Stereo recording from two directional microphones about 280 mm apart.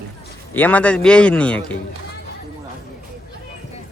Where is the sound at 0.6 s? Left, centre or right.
Centre.